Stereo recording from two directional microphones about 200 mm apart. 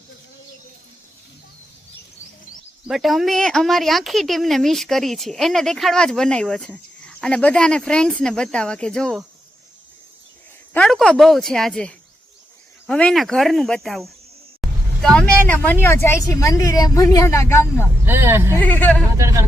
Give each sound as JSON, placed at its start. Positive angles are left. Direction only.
{"t": 2.8, "sound": "a woman's voice", "side_deg": 0}
{"t": 10.8, "sound": "a woman's voice", "side_deg": 5}
{"t": 18.0, "sound": "speech", "side_deg": -10}
{"t": 18.5, "sound": "speech", "side_deg": 10}
{"t": 19.1, "sound": "speech", "side_deg": -15}